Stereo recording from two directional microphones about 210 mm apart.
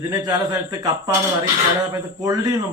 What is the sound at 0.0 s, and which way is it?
Speech, 20° right (ahead or behind).